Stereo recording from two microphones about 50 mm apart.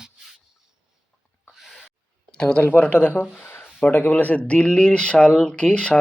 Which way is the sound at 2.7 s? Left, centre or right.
Left.